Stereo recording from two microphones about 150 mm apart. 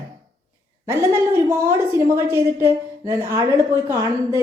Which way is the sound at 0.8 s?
15° right (ahead or behind).